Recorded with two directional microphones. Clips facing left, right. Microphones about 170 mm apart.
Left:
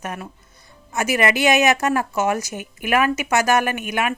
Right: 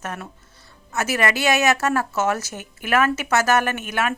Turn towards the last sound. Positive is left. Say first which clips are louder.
# left 1 dB
turn(degrees=15)  # may be behind; listen again after turning